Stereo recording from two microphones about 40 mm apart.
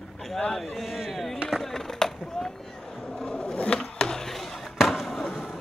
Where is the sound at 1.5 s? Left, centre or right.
Centre.